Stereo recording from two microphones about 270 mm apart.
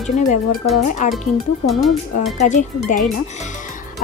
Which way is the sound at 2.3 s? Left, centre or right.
Left.